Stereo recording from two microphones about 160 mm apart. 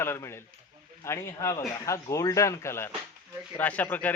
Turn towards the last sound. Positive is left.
turn(degrees=10)  # may be behind; listen again after turning